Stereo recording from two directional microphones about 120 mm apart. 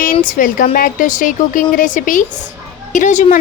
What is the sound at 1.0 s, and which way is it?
Speech, 90° left.